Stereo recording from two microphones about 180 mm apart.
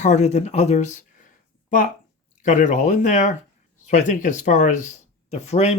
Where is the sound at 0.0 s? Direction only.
40° left (ahead or behind).